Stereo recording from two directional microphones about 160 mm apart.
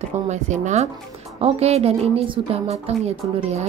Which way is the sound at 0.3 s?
45° right (ahead or behind).